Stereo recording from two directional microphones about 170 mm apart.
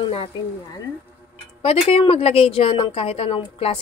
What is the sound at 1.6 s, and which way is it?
A woman's voice, 35° left (ahead or behind).